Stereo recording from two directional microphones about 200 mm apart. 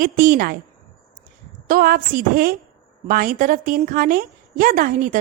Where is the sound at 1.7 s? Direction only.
45° right (ahead or behind).